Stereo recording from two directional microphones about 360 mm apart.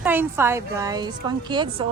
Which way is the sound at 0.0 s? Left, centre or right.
Centre.